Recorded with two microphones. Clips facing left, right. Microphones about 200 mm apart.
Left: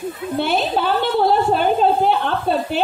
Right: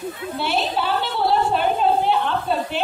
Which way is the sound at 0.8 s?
50° left (ahead or behind).